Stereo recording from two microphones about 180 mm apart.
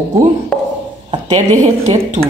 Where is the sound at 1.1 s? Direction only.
40° right (ahead or behind).